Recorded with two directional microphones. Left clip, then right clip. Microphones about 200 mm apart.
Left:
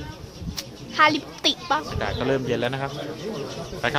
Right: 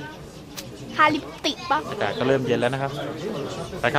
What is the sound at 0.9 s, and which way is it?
Speech, 10° left (ahead or behind).